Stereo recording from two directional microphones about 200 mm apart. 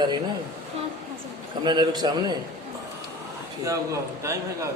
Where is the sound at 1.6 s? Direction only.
20° right (ahead or behind).